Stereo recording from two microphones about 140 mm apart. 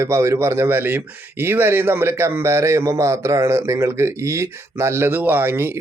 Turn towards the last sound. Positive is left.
turn(degrees=-15)  # may be behind; listen again after turning